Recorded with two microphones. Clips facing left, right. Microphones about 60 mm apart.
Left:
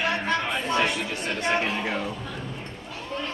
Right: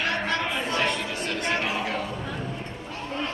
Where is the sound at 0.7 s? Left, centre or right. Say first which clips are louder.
Left 3 dB; centre.